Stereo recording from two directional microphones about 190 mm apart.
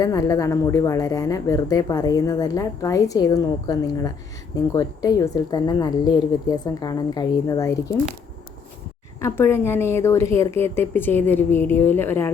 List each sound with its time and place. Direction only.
0.0 s speech: 20° left (ahead or behind)
9.2 s a woman's voice: 15° left (ahead or behind)